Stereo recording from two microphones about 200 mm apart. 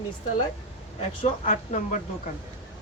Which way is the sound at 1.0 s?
35° left (ahead or behind).